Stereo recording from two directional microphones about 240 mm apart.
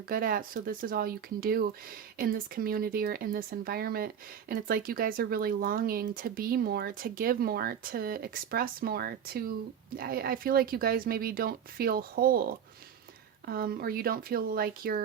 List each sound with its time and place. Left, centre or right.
0.1 s speech: right
13.5 s speech: right